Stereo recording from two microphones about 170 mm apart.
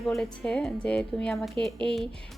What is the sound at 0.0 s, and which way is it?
A woman's voice, centre (ahead or behind).